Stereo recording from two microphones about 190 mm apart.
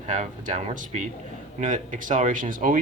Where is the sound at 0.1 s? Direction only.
40° right (ahead or behind).